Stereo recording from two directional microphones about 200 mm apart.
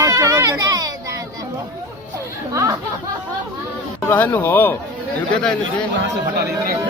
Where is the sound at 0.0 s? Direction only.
15° right (ahead or behind).